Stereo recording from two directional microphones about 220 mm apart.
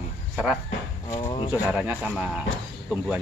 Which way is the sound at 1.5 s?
5° right (ahead or behind).